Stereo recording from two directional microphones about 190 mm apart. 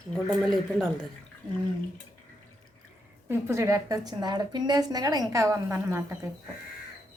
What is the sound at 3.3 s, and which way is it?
A woman's voice, 15° right (ahead or behind).